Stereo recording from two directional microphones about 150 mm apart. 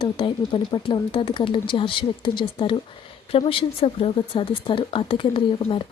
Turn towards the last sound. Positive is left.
turn(degrees=35)  # may be behind; listen again after turning